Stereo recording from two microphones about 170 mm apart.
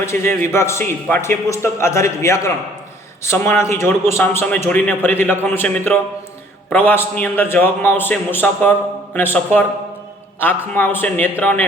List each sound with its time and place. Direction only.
0.0 s a man's voice: 15° left (ahead or behind)